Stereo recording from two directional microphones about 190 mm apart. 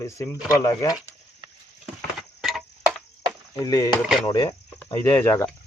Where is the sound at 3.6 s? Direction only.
20° left (ahead or behind).